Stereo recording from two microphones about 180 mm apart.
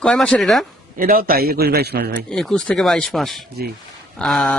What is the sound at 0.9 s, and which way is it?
A man's voice, 55° right (ahead or behind).